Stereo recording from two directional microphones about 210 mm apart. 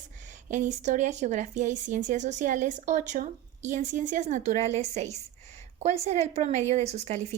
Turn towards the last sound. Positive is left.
turn(degrees=-30)  # may be behind; listen again after turning